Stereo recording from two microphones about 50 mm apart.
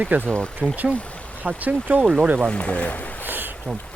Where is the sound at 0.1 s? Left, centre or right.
Right.